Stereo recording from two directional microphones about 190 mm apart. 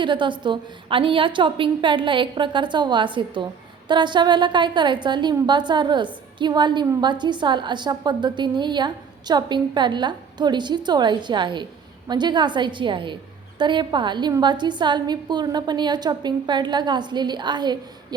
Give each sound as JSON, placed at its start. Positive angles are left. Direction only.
{"t": 0.0, "sound": "a woman's voice", "side_deg": -25}